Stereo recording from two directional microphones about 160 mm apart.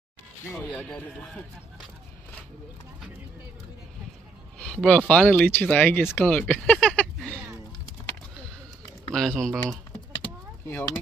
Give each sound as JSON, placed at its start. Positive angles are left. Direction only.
{"t": 0.7, "sound": "speech", "side_deg": 5}
{"t": 4.6, "sound": "speech", "side_deg": 5}
{"t": 9.1, "sound": "speech", "side_deg": 5}